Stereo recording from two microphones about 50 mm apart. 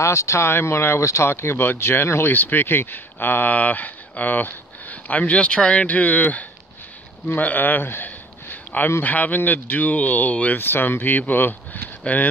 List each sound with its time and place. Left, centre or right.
0.0 s speech: left
2.3 s speech: left
3.5 s speech: left
7.3 s a sound: left
9.0 s speech: left
10.6 s speech: left
12.1 s speech: left